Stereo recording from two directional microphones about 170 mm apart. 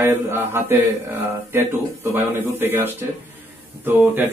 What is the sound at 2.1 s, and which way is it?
Speech, 10° right (ahead or behind).